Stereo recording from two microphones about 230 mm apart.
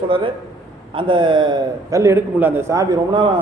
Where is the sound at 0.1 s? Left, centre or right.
Right.